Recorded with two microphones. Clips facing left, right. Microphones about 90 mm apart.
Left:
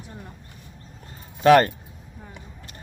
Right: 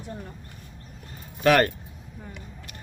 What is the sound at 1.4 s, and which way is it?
Speech, 30° left (ahead or behind).